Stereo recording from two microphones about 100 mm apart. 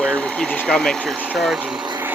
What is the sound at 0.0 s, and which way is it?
Speech, 10° left (ahead or behind).